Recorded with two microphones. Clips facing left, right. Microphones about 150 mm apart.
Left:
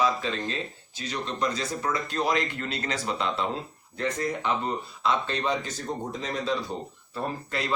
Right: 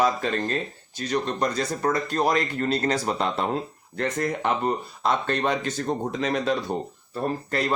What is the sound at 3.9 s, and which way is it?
Speech, 60° right (ahead or behind).